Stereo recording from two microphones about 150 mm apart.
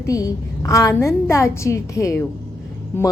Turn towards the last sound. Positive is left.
turn(degrees=15)  # may be behind; listen again after turning